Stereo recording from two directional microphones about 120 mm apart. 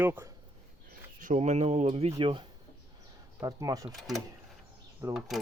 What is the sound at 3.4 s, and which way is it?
Speech, 30° right (ahead or behind).